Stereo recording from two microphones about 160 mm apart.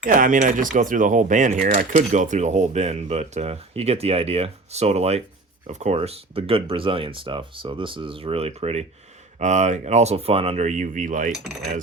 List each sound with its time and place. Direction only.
0.0 s coin: 60° right (ahead or behind)
1.9 s speech: 50° right (ahead or behind)